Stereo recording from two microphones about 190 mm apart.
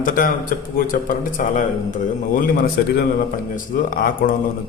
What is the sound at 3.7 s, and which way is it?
Speech, 45° left (ahead or behind).